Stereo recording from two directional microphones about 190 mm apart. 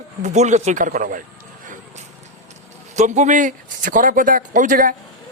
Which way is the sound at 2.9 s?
35° right (ahead or behind).